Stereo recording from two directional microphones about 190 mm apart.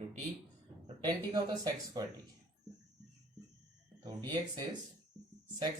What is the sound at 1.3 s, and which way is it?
Speech, 20° right (ahead or behind).